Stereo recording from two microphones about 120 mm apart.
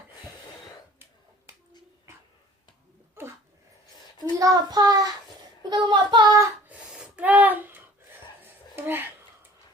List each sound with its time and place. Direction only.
3.2 s dog: 20° right (ahead or behind)
4.4 s a child's voice: 30° right (ahead or behind)
6.7 s a sound: 10° right (ahead or behind)